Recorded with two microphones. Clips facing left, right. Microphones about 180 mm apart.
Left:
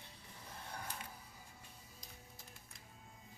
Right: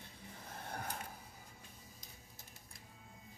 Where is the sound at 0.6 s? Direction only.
50° right (ahead or behind).